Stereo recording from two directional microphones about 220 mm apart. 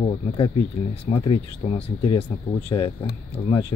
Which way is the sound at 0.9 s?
25° left (ahead or behind).